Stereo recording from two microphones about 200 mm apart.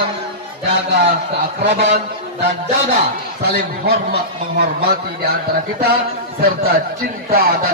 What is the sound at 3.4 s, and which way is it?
Speech, 50° right (ahead or behind).